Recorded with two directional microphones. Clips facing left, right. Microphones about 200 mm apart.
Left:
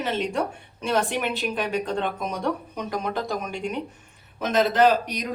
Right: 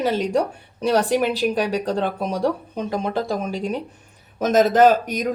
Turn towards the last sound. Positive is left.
turn(degrees=-45)  # may be behind; listen again after turning